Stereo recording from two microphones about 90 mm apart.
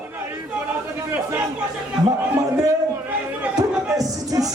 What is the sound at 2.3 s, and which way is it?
Speech, 40° right (ahead or behind).